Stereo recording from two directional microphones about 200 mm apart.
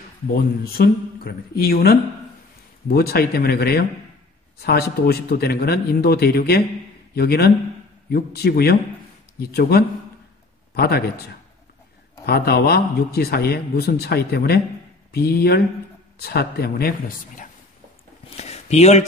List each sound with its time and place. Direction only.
0.3 s speech: 50° left (ahead or behind)
12.3 s speech: 50° left (ahead or behind)
18.3 s speech: 35° left (ahead or behind)